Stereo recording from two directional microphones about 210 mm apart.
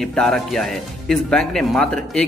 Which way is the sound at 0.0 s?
Centre (ahead or behind).